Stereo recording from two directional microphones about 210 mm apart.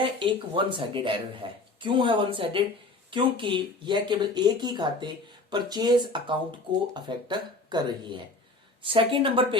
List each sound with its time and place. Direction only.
0.0 s speech: 25° right (ahead or behind)